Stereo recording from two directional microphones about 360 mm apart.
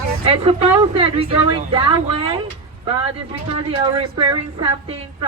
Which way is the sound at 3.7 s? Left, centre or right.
Centre.